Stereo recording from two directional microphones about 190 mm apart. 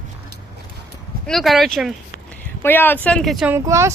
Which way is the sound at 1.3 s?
Centre (ahead or behind).